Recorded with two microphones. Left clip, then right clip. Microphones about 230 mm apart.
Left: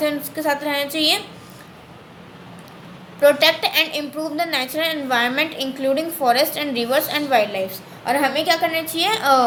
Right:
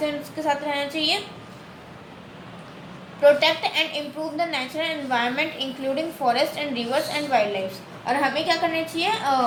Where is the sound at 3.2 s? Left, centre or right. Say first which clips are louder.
Left 3 dB; left.